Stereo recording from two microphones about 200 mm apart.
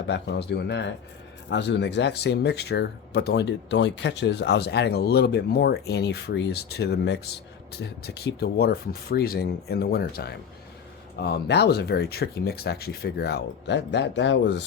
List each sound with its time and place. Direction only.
0.1 s speech: 60° left (ahead or behind)